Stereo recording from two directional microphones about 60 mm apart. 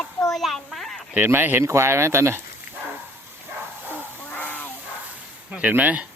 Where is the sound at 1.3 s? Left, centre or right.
Right.